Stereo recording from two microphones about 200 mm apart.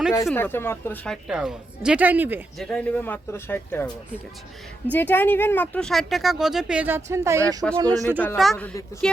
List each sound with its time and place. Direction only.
0.3 s speech: 10° left (ahead or behind); by 2.4 s 10° right (ahead or behind)
2.6 s speech: 5° left (ahead or behind)
4.9 s speech: 10° left (ahead or behind); by 8.2 s 15° right (ahead or behind)
8.4 s speech: 5° left (ahead or behind)